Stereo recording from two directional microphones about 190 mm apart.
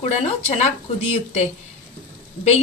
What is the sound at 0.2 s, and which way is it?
Speech, 35° left (ahead or behind).